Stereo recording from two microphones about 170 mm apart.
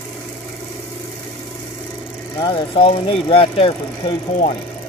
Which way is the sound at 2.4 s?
30° left (ahead or behind).